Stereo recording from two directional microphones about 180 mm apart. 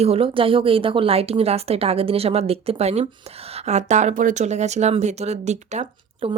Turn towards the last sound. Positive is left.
turn(degrees=-35)  # may be behind; listen again after turning